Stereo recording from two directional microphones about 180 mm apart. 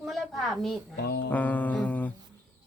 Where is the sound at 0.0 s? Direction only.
Centre (ahead or behind).